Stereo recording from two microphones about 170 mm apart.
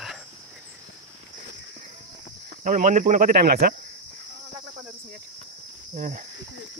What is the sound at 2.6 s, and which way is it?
Speech, 50° right (ahead or behind).